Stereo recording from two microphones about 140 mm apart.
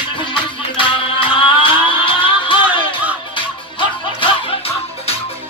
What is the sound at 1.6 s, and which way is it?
Music, 40° left (ahead or behind).